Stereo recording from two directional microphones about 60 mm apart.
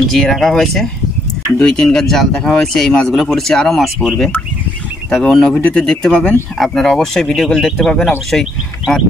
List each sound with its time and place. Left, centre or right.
0.1 s speech: centre
1.6 s speech: centre
1.9 s speech: centre
6.6 s speech: centre